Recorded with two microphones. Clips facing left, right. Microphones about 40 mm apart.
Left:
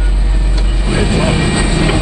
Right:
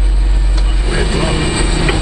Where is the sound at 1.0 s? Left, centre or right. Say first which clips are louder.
Left 3 dB; centre.